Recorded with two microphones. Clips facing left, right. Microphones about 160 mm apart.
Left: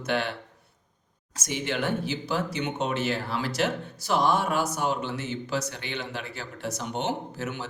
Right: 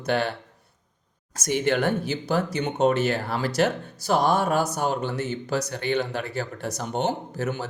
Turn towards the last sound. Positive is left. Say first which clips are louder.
# right 4 dB
turn(degrees=-40)  # may be behind; listen again after turning